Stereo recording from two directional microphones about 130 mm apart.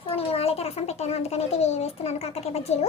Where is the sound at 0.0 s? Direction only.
50° left (ahead or behind).